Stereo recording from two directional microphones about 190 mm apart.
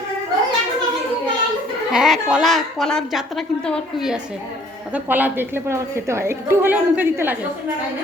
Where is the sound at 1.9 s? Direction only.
Centre (ahead or behind).